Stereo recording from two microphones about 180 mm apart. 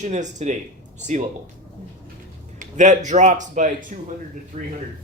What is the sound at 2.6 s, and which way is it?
A man's voice, 40° right (ahead or behind).